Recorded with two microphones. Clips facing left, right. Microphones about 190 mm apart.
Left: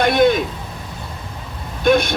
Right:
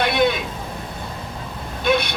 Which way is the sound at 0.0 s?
45° left (ahead or behind).